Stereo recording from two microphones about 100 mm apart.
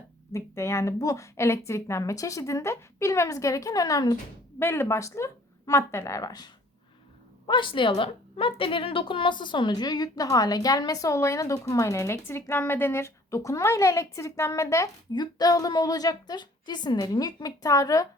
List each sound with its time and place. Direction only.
0.3 s a woman's voice: 30° left (ahead or behind)
4.6 s speech: 25° left (ahead or behind); by 6.5 s 40° left (ahead or behind)
7.4 s a woman's voice: 50° left (ahead or behind); by 14.8 s 30° left (ahead or behind)
15.1 s a woman's voice: 45° left (ahead or behind)